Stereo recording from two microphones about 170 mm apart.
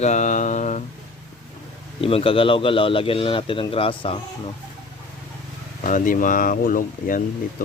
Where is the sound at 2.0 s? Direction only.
35° left (ahead or behind).